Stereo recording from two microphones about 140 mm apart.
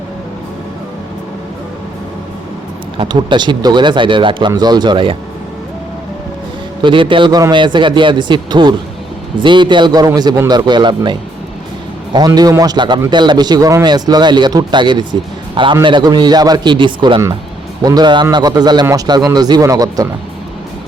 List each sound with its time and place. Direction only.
3.0 s speech: 35° right (ahead or behind)
6.8 s a man's voice: 35° right (ahead or behind)